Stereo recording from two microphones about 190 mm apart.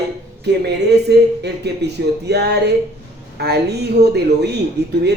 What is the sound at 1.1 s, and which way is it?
A man's voice, 60° right (ahead or behind).